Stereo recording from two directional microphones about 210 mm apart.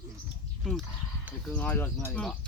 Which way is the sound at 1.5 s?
10° left (ahead or behind).